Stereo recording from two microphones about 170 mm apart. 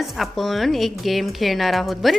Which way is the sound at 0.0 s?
Centre (ahead or behind).